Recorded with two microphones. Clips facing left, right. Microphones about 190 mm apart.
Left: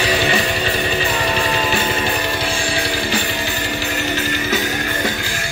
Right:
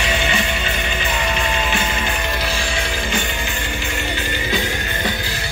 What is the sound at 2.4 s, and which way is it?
Music, 30° left (ahead or behind).